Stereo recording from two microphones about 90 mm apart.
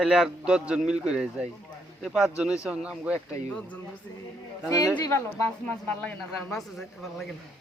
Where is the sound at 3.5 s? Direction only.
15° left (ahead or behind).